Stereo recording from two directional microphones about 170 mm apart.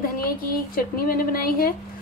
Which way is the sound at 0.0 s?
60° left (ahead or behind).